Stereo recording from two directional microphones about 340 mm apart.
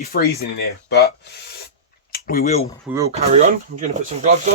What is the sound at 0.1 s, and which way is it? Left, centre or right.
Speech, left.